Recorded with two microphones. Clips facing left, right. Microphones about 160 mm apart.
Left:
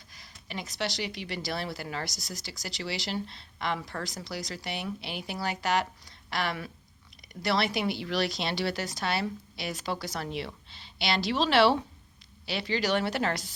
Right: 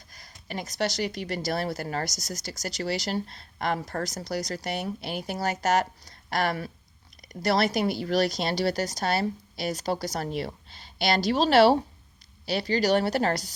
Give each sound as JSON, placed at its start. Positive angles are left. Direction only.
{"t": 0.1, "sound": "a woman's voice", "side_deg": -45}